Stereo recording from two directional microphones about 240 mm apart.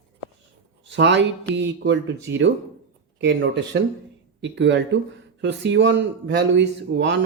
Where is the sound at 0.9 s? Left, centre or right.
Right.